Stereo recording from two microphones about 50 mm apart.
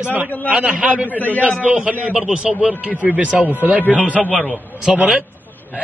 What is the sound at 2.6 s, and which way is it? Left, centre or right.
A man's voice, right.